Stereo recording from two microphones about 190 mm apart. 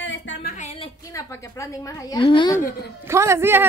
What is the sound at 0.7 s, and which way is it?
A woman's voice, 15° left (ahead or behind).